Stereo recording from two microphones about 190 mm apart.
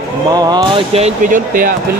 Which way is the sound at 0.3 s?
20° right (ahead or behind).